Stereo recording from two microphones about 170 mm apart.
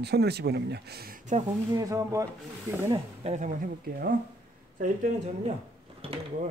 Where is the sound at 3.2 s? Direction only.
45° right (ahead or behind).